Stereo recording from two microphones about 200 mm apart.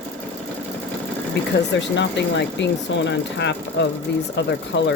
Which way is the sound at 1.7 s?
60° left (ahead or behind).